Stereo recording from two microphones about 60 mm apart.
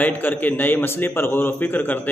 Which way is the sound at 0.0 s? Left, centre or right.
Left.